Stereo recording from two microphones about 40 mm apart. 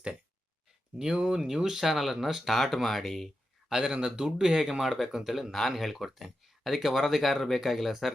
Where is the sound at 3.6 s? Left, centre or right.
Centre.